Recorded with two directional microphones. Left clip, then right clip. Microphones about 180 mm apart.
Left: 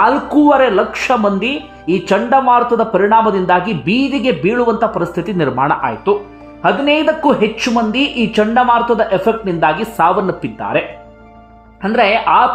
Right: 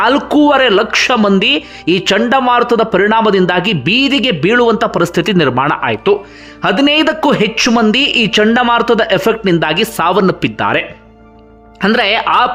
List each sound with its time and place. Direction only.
0.0 s speech: 20° right (ahead or behind)